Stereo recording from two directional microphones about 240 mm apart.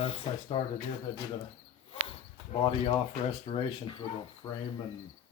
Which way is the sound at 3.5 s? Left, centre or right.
Left.